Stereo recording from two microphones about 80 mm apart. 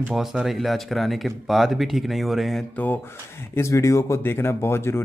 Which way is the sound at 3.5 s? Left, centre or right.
Left.